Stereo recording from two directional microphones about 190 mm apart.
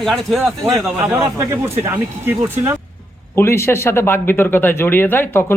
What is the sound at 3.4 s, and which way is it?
Speech, 15° left (ahead or behind).